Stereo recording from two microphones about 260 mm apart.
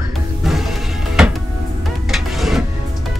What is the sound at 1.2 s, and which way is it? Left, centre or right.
Music, centre.